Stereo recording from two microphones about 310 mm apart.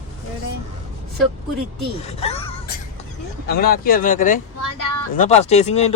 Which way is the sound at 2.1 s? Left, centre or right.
Centre.